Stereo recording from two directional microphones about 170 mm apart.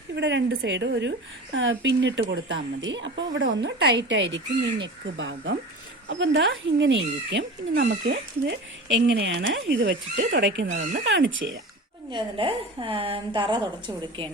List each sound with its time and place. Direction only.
0.2 s speech: 90° right
7.7 s speech: 55° right (ahead or behind); by 10.7 s 90° right
10.7 s speech: 45° right (ahead or behind)
11.0 s speech: 90° right
12.1 s a woman's voice: 30° right (ahead or behind)